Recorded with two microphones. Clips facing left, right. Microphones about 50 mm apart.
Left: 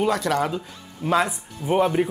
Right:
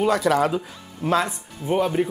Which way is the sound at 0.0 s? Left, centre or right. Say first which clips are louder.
Right 3 dB; centre.